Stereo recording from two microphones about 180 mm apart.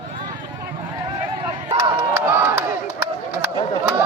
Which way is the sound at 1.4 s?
25° right (ahead or behind).